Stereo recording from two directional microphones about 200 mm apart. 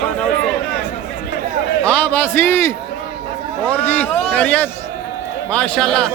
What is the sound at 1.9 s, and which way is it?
A man's voice, 5° left (ahead or behind).